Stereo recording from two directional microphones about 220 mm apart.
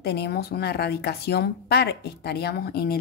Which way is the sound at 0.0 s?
45° left (ahead or behind).